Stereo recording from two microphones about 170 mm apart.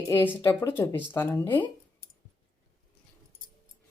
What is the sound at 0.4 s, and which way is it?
Speech, 15° left (ahead or behind).